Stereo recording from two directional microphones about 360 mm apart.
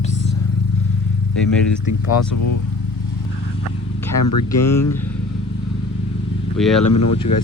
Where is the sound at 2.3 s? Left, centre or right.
Left.